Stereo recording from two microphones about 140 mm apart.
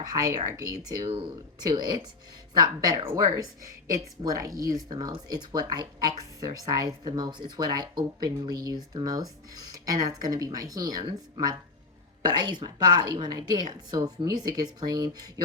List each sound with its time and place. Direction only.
0.0 s speech: 25° right (ahead or behind)